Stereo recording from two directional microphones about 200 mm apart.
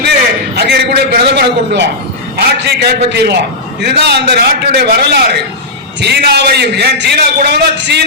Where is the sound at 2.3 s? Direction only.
55° right (ahead or behind).